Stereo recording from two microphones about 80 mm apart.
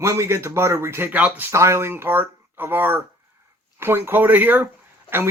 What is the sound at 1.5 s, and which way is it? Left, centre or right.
Speech, right.